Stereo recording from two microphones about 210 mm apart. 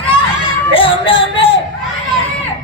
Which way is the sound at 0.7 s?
25° left (ahead or behind).